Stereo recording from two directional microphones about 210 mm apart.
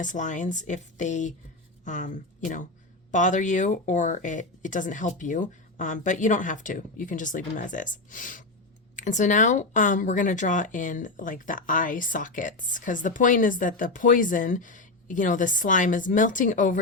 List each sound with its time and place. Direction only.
0.0 s speech: 35° left (ahead or behind)